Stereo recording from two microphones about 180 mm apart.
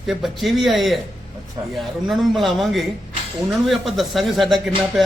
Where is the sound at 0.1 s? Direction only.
Centre (ahead or behind).